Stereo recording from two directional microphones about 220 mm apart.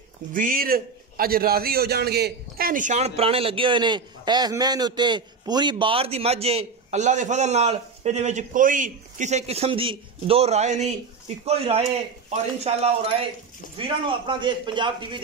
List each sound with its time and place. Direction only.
0.3 s a man's voice: 40° right (ahead or behind); by 15.0 s 20° right (ahead or behind)